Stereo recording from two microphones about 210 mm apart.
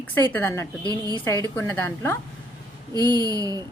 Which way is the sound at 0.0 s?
10° left (ahead or behind).